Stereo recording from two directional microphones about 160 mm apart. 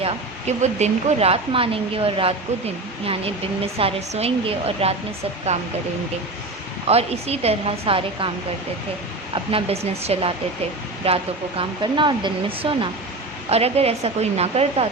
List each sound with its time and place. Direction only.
0.0 s speech: 45° right (ahead or behind)
6.8 s speech: 40° right (ahead or behind)
9.3 s speech: 35° right (ahead or behind)